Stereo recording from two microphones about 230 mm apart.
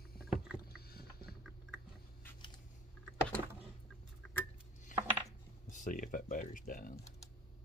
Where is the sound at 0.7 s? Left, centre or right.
Left.